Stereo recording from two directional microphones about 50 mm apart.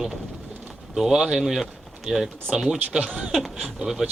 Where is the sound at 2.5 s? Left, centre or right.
Centre.